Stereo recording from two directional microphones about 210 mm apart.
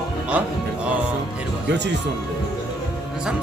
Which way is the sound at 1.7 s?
55° right (ahead or behind).